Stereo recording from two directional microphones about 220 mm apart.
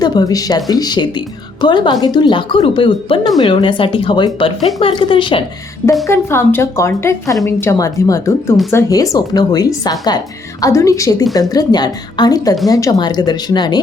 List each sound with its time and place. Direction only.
0.0 s speech: 20° left (ahead or behind)
6.1 s speech: 10° left (ahead or behind)